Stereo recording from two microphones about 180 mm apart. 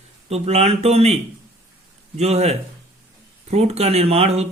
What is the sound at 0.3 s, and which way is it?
Speech, 35° right (ahead or behind).